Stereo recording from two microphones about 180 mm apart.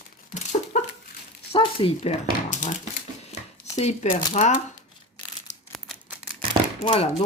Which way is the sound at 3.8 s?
40° left (ahead or behind).